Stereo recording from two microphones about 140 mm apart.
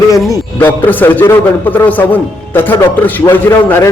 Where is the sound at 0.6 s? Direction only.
15° left (ahead or behind).